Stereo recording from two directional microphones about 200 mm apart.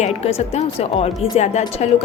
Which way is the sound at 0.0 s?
30° left (ahead or behind).